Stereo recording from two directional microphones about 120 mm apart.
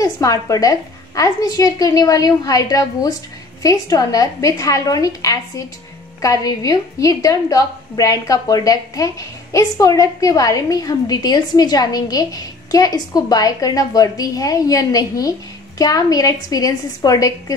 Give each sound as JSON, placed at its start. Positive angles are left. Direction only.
{"t": 0.0, "sound": "a woman's voice", "side_deg": 30}